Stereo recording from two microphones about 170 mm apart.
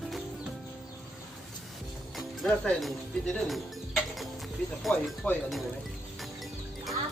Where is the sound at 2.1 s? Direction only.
Centre (ahead or behind).